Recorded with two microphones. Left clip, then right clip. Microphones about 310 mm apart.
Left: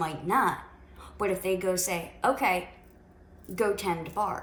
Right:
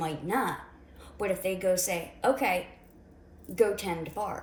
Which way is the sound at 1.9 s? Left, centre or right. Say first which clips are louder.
Left 1 dB; left.